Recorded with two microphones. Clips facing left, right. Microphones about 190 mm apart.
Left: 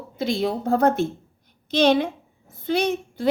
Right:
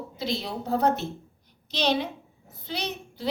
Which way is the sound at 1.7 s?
50° left (ahead or behind).